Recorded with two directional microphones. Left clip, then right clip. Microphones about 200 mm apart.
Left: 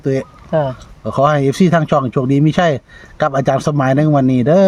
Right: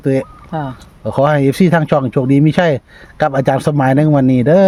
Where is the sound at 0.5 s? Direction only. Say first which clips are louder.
Left 7 dB; 35° left (ahead or behind).